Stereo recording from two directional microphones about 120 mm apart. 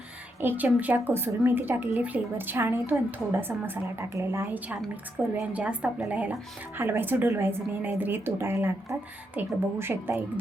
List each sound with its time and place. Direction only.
0.4 s a woman's voice: 15° right (ahead or behind)